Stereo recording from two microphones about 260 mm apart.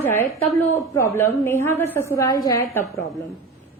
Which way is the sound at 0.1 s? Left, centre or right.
Centre.